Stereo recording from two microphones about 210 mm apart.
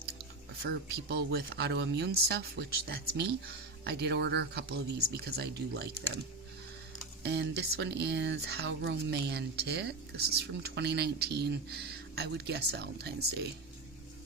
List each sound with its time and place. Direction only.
0.6 s speech: 50° right (ahead or behind)
7.2 s speech: 55° right (ahead or behind)